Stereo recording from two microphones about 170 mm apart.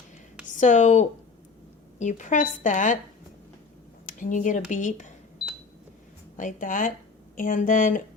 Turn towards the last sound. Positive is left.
turn(degrees=50)  # may be behind; listen again after turning